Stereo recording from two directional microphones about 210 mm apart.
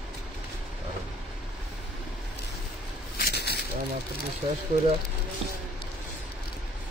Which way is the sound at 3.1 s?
50° left (ahead or behind).